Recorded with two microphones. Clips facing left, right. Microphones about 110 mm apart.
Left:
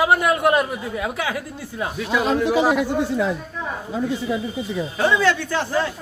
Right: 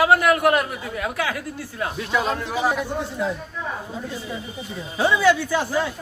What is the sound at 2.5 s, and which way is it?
Speech, 90° left.